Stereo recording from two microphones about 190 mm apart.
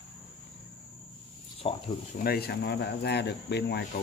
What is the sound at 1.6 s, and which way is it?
Cricket, 30° left (ahead or behind).